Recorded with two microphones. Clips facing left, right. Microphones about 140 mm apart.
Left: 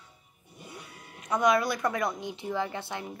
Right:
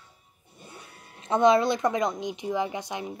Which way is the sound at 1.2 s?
25° right (ahead or behind).